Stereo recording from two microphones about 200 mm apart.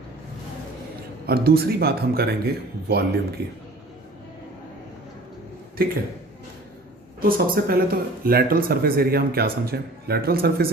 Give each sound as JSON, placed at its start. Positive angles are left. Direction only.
{"t": 1.3, "sound": "a man's voice", "side_deg": -50}
{"t": 5.7, "sound": "speech", "side_deg": -50}
{"t": 7.2, "sound": "a man's voice", "side_deg": -45}